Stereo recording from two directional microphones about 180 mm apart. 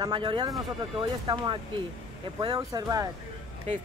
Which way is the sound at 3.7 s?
35° right (ahead or behind).